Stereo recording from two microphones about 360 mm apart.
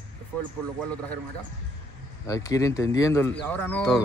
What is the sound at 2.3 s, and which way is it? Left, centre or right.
Speech, centre.